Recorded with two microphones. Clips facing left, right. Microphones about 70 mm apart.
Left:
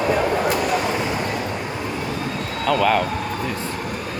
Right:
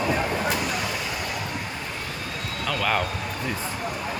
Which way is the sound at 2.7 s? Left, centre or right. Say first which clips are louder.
Left 7 dB; centre.